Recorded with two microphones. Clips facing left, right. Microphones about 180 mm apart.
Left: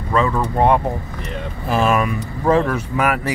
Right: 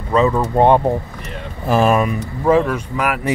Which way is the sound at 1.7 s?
40° right (ahead or behind).